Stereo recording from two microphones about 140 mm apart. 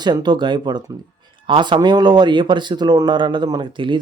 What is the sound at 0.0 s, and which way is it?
Speech, 30° right (ahead or behind).